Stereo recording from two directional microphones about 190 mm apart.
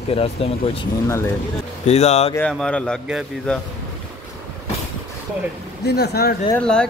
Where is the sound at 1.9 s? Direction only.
35° left (ahead or behind).